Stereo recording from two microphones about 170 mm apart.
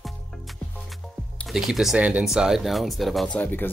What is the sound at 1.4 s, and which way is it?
Speech, centre (ahead or behind).